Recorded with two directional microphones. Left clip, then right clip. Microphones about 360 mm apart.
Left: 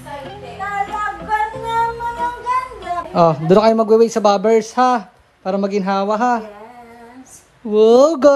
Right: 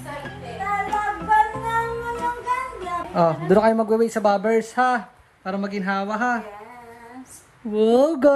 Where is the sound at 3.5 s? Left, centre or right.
Right.